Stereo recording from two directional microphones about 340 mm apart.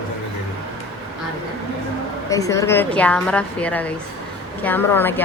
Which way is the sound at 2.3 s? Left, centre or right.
Centre.